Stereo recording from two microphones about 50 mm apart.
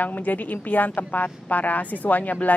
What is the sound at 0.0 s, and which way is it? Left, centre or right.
Speech, left.